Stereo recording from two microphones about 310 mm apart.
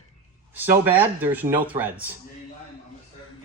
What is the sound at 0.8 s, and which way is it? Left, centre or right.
Speech, centre.